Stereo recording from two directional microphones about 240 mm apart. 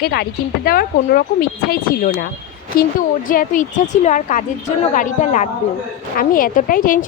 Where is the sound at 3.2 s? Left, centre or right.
Left.